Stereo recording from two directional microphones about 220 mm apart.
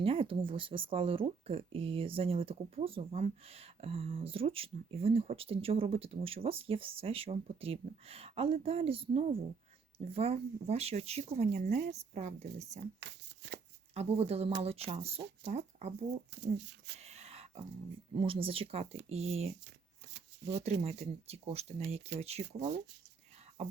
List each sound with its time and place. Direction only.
0.0 s speech: 25° right (ahead or behind)
13.1 s shuffling cards: 50° right (ahead or behind)
13.9 s speech: 30° right (ahead or behind)
16.3 s speech: 50° right (ahead or behind)
17.0 s a sound: 30° right (ahead or behind)
18.1 s speech: 25° right (ahead or behind)
20.1 s shuffling cards: 50° right (ahead or behind)
20.8 s speech: 30° right (ahead or behind)